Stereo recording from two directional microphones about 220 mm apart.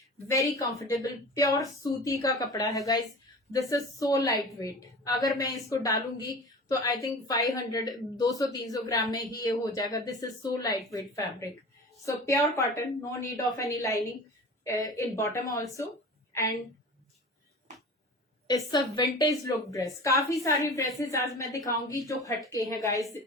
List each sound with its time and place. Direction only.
0.3 s speech: 15° left (ahead or behind)
18.4 s a woman's voice: 20° left (ahead or behind)